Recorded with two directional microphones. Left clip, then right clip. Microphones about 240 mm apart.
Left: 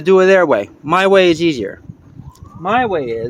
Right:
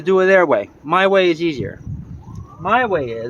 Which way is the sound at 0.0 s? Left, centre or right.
Left.